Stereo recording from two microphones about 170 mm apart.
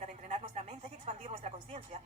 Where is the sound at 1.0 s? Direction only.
40° right (ahead or behind).